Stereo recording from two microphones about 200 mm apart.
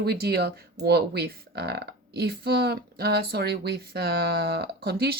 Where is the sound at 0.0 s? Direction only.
50° right (ahead or behind).